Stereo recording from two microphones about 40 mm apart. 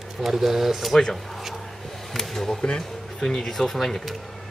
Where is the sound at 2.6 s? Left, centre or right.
Centre.